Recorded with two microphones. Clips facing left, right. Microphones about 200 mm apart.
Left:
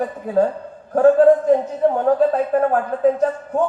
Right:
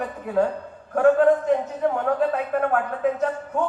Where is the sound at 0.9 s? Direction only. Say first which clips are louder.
Left 5 dB; 35° left (ahead or behind).